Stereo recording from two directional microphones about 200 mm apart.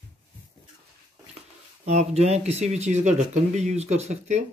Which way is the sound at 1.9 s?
35° right (ahead or behind).